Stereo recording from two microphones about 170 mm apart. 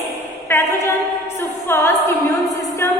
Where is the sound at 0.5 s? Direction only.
10° left (ahead or behind).